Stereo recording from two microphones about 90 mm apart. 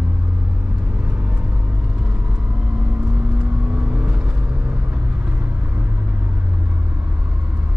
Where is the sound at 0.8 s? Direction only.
15° right (ahead or behind).